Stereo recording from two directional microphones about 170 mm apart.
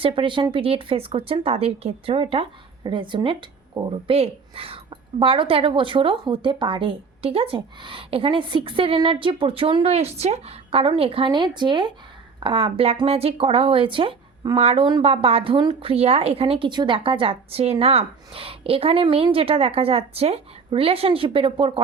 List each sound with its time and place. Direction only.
0.0 s speech: 30° right (ahead or behind)